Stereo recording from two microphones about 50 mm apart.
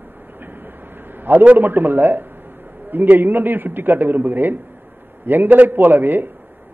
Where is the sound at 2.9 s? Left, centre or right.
Right.